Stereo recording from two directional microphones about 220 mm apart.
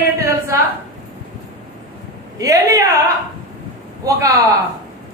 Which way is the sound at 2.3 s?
15° right (ahead or behind).